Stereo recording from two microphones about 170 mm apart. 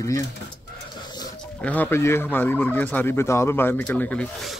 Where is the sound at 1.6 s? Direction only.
10° left (ahead or behind).